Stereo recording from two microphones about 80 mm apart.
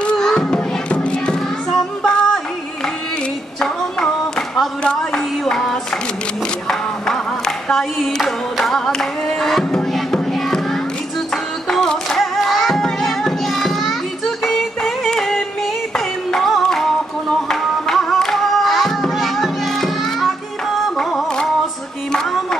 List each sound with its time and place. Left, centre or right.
0.0 s music: centre
3.6 s a sound: centre
6.7 s music: centre